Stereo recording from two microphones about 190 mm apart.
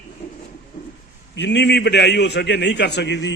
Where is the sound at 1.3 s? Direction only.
65° left (ahead or behind).